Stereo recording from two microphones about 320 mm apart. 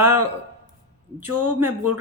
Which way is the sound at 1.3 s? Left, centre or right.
Right.